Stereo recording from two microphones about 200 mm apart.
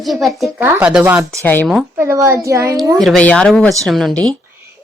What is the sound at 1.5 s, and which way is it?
Speech, 10° left (ahead or behind).